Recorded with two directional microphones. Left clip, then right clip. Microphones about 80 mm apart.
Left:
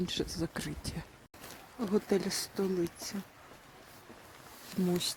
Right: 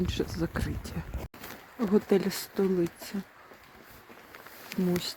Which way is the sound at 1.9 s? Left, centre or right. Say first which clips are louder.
Right 5 dB; right.